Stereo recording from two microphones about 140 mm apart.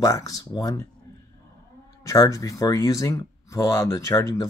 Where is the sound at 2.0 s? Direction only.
25° left (ahead or behind).